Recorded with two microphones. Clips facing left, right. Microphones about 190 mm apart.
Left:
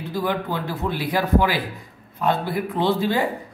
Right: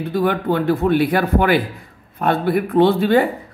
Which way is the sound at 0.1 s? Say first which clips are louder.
Right 6 dB; 60° right (ahead or behind).